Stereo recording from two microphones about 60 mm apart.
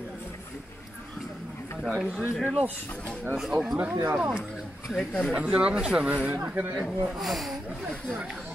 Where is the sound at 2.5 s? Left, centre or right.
Right.